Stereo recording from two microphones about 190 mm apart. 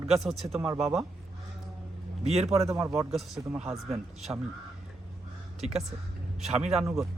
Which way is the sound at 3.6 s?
35° right (ahead or behind).